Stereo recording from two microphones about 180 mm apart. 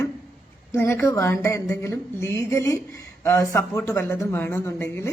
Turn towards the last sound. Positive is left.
turn(degrees=15)  # may be behind; listen again after turning